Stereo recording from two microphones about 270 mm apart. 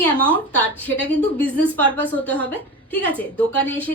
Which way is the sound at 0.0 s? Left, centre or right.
Centre.